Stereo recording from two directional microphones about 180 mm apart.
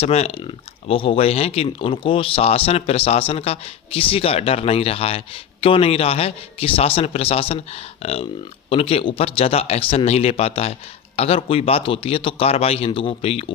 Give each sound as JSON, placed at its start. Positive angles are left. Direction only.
{"t": 0.0, "sound": "speech", "side_deg": 35}